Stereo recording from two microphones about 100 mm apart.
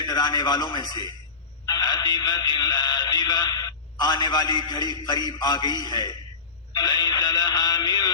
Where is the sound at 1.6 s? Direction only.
40° left (ahead or behind).